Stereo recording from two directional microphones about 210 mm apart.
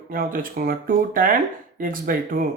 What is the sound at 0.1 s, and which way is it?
Speech, 40° right (ahead or behind).